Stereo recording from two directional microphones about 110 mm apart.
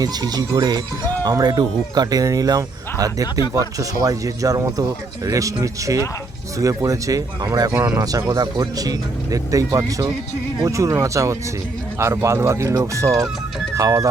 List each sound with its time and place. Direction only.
0.0 s speech: 35° right (ahead or behind)